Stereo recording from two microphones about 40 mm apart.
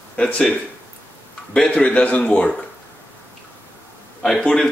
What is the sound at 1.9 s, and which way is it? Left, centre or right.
Speech, left.